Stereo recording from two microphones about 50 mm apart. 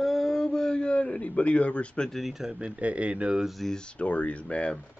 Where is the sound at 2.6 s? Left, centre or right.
Right.